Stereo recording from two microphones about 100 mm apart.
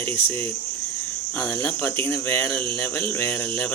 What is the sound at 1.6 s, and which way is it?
Speech, 20° left (ahead or behind).